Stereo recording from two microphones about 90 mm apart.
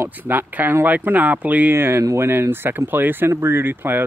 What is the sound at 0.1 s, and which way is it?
Speech, 20° right (ahead or behind).